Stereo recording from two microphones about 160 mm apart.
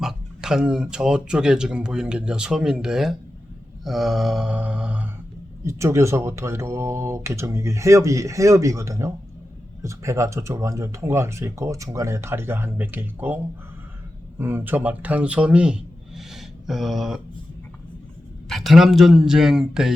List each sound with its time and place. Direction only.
0.0 s speech: 5° right (ahead or behind)
18.4 s speech: centre (ahead or behind)